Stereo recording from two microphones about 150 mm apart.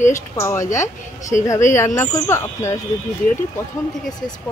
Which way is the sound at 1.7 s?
20° left (ahead or behind).